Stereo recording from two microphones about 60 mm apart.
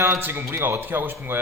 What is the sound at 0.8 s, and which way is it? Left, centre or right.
Speech, right.